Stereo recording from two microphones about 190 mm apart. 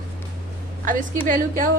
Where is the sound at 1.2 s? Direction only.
45° right (ahead or behind).